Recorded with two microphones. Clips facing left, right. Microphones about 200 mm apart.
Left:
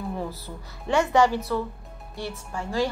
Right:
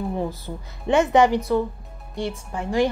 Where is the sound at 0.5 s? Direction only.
25° right (ahead or behind).